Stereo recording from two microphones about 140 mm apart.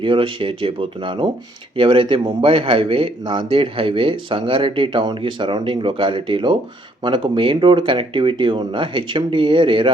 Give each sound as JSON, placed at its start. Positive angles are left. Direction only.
{"t": 0.0, "sound": "speech", "side_deg": -40}